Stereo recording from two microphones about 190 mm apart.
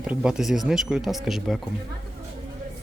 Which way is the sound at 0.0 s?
5° right (ahead or behind).